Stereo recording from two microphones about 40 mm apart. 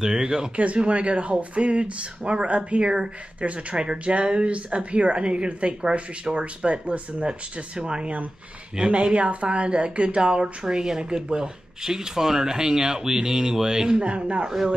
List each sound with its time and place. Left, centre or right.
0.0 s speech: centre
0.6 s speech: right
3.3 s speech: right